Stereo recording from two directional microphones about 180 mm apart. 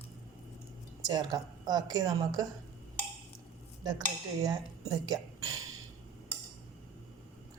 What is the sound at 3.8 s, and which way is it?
Speech, 20° right (ahead or behind).